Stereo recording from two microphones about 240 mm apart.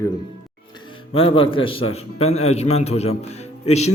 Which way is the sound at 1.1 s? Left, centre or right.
Left.